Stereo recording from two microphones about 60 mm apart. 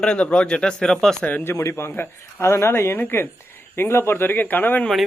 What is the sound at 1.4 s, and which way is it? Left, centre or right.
A man's voice, left.